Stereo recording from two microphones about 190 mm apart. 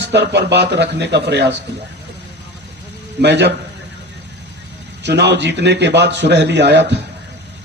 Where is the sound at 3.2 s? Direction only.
65° right (ahead or behind).